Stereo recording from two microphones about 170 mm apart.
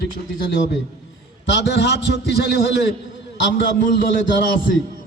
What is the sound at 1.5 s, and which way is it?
A man's voice, 85° left.